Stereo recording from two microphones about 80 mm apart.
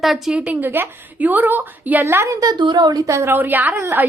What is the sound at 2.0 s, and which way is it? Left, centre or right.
Speech, right.